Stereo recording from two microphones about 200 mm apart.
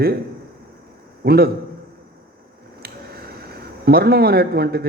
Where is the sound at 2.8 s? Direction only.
50° right (ahead or behind).